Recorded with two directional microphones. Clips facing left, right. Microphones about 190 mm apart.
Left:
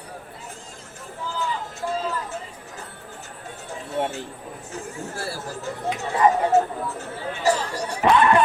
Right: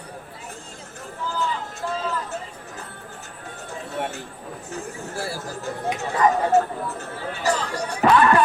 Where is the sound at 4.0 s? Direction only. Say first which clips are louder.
Left 3 dB; 20° left (ahead or behind).